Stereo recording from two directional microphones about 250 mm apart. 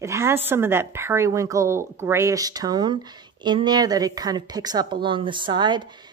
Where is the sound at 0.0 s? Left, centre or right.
Centre.